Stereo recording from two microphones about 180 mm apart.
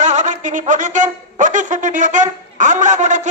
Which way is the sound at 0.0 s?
40° right (ahead or behind).